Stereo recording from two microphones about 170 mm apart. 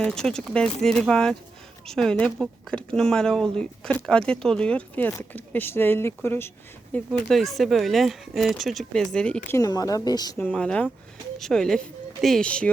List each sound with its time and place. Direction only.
0.0 s speech: 5° left (ahead or behind)
7.1 s speech: centre (ahead or behind)
9.5 s speech: 20° left (ahead or behind)
10.3 s speech: 5° left (ahead or behind)